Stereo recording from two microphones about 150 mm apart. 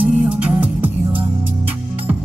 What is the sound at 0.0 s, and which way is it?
Music, 10° right (ahead or behind).